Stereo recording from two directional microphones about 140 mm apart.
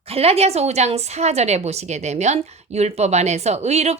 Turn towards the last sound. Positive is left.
turn(degrees=-50)  # may be behind; listen again after turning